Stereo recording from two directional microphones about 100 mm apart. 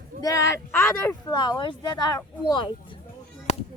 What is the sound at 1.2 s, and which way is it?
Speech, 45° left (ahead or behind).